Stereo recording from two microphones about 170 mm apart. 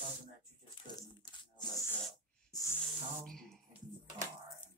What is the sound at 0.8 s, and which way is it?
Crumpling, 25° left (ahead or behind).